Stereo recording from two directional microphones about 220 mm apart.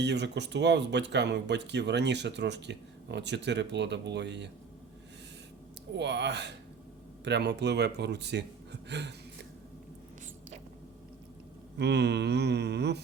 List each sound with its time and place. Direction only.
0.0 s speech: 50° right (ahead or behind)
5.9 s speech: 50° right (ahead or behind)
11.8 s speech: 50° right (ahead or behind)